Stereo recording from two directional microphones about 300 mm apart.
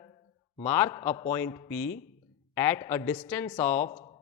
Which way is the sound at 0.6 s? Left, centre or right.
Centre.